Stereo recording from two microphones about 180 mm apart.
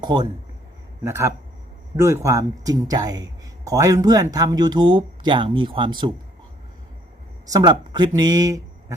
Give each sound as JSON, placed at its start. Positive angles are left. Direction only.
{"t": 0.0, "sound": "a man's voice", "side_deg": -25}
{"t": 7.5, "sound": "speech", "side_deg": -25}